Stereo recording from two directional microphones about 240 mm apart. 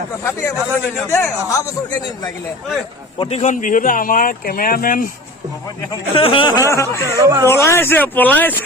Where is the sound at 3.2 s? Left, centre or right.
Left.